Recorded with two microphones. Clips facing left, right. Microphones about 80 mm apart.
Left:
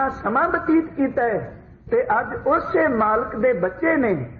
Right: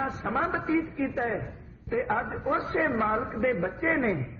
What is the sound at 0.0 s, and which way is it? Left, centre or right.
A man's voice, left.